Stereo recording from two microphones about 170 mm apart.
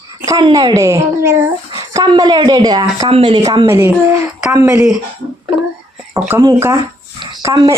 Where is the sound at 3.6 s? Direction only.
15° right (ahead or behind).